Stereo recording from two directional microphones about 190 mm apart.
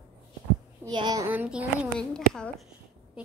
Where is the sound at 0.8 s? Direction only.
20° right (ahead or behind).